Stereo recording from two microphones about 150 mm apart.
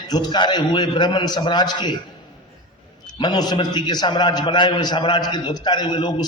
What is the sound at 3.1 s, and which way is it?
A man's voice, 30° left (ahead or behind).